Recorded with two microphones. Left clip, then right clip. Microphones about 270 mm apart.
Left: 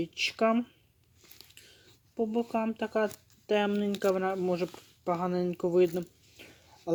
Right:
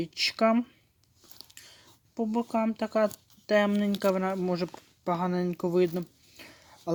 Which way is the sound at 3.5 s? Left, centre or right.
Right.